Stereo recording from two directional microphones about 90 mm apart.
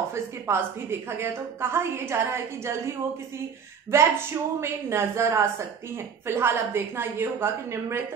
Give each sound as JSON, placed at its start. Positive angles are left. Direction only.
{"t": 0.1, "sound": "a woman's voice", "side_deg": -30}
{"t": 3.9, "sound": "a woman's voice", "side_deg": -30}